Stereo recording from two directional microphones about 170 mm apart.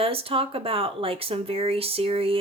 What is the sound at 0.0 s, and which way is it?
Speech, 35° right (ahead or behind).